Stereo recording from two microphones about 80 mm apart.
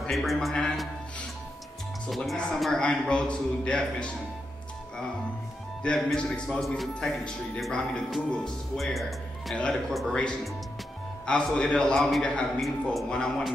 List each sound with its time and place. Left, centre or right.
0.1 s a man's voice: centre
2.0 s a man's voice: centre
5.8 s a man's voice: centre